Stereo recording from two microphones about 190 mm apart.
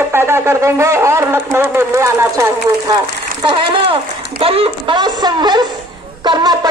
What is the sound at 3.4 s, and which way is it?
Speech, 25° right (ahead or behind).